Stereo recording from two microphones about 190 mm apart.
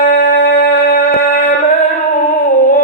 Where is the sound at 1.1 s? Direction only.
45° left (ahead or behind).